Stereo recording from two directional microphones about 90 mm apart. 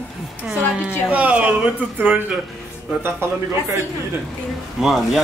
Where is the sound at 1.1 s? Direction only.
15° right (ahead or behind).